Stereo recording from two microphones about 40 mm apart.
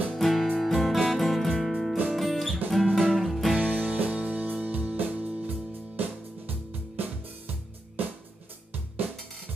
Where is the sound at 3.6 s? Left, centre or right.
Right.